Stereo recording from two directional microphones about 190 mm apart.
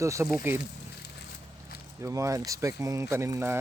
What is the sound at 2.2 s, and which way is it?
Speech, 15° right (ahead or behind).